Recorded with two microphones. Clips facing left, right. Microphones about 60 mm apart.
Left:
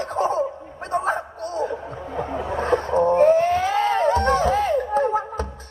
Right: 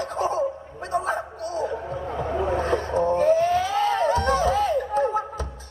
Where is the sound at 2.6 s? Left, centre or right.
Left.